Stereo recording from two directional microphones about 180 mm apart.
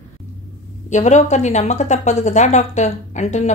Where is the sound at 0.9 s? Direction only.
40° left (ahead or behind).